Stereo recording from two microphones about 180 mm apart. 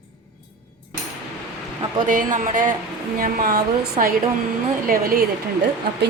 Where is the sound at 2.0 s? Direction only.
50° right (ahead or behind).